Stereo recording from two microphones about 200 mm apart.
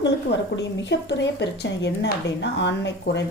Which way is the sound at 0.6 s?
60° left (ahead or behind).